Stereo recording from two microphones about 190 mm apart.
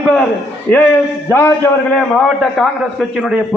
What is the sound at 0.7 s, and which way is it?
Speech, 10° left (ahead or behind).